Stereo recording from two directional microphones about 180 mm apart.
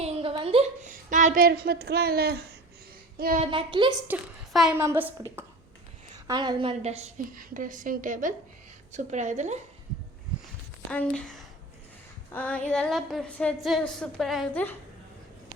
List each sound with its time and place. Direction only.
0.0 s a sound: 30° right (ahead or behind)
0.9 s speech: 45° right (ahead or behind); by 2.5 s 60° right (ahead or behind)
3.2 s a sound: 50° right (ahead or behind)
3.4 s a woman's voice: 30° right (ahead or behind)
4.1 s a woman's voice: centre (ahead or behind)
4.8 s a woman's voice: 10° right (ahead or behind)
6.2 s a woman's voice: 25° right (ahead or behind); by 9.6 s 40° right (ahead or behind)
10.9 s a woman's voice: 5° left (ahead or behind)